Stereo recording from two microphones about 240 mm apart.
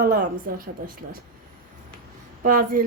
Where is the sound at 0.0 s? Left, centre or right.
Right.